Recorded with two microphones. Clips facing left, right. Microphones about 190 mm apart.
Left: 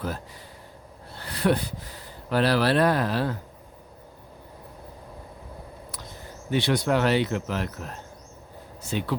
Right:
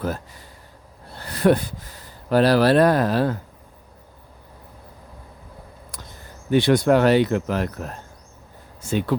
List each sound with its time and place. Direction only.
1.2 s speech: 45° right (ahead or behind)
6.5 s speech: 50° right (ahead or behind)